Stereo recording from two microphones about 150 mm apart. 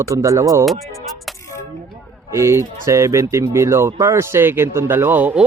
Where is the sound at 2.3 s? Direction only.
20° right (ahead or behind).